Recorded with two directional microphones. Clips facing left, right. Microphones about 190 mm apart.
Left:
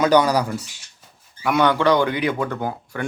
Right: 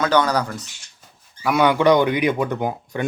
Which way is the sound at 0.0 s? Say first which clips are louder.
Left 2 dB; 15° left (ahead or behind).